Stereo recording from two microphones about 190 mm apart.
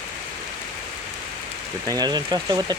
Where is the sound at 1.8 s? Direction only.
20° right (ahead or behind).